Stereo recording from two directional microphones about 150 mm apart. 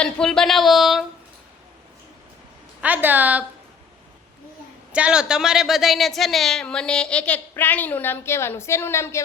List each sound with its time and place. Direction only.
0.0 s a woman's voice: 5° left (ahead or behind)
2.8 s a woman's voice: 10° right (ahead or behind)
4.9 s a woman's voice: 5° right (ahead or behind); by 9.2 s 15° left (ahead or behind)